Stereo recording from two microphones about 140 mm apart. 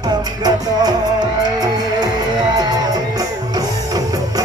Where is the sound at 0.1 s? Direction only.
30° right (ahead or behind).